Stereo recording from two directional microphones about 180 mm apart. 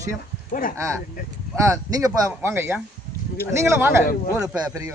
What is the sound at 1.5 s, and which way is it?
Speech, 15° right (ahead or behind).